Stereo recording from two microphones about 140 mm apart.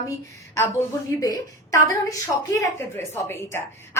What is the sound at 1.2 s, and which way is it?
A woman's voice, 25° left (ahead or behind).